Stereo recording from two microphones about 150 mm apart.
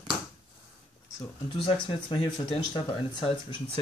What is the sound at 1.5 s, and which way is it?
Speech, 35° left (ahead or behind).